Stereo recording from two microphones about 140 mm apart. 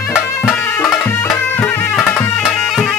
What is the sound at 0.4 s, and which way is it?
Music, 15° left (ahead or behind).